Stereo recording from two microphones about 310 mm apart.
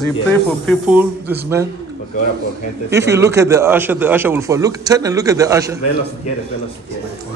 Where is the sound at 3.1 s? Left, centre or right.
Centre.